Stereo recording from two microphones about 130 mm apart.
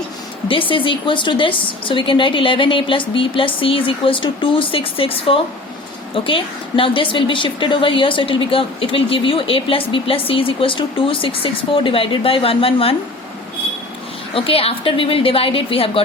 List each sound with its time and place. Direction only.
0.4 s a woman's voice: 40° left (ahead or behind)
14.3 s speech: 45° left (ahead or behind)